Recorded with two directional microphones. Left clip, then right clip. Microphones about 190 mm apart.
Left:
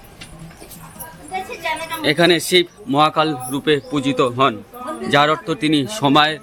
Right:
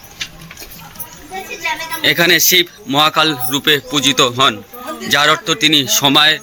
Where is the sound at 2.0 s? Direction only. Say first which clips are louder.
Right 4 dB; 5° left (ahead or behind).